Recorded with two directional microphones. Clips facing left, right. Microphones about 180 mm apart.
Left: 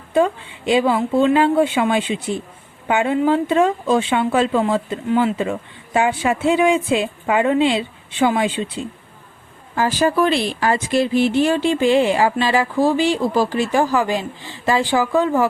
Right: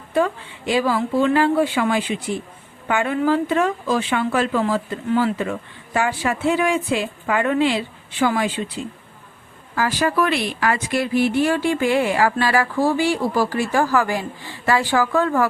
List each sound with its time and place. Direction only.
0.1 s a woman's voice: 25° left (ahead or behind)